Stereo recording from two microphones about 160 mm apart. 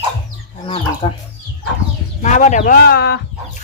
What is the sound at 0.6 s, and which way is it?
Chicken, 35° left (ahead or behind).